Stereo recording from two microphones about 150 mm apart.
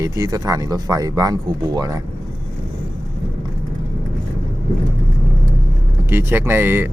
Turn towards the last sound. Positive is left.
turn(degrees=-15)  # may be behind; listen again after turning